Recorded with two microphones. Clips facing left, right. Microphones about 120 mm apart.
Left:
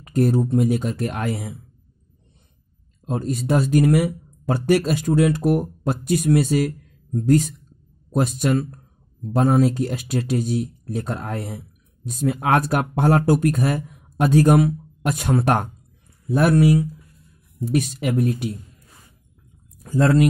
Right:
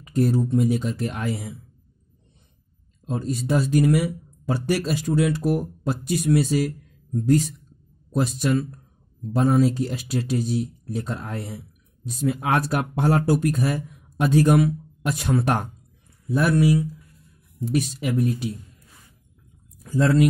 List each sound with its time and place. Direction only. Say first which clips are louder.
0.0 s speech: left 2 dB; 55° left (ahead or behind)
3.1 s speech: left 2 dB; 55° left (ahead or behind)
19.8 s speech: left 2 dB; 50° left (ahead or behind)